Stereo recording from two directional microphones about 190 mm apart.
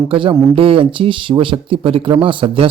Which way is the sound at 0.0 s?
25° right (ahead or behind).